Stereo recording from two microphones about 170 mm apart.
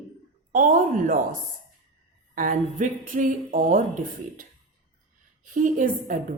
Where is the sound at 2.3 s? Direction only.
50° right (ahead or behind).